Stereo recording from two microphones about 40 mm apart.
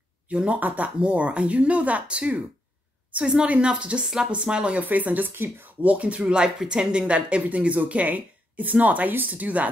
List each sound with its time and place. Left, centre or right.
0.5 s a woman's voice: right
4.0 s speech: centre
4.3 s speech: right
4.7 s speech: right
5.3 s speech: right
5.8 s speech: right